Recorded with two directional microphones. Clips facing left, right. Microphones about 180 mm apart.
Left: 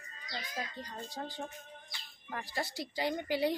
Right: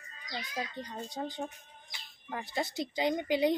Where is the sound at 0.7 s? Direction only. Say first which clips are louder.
Right 4 dB; 25° right (ahead or behind).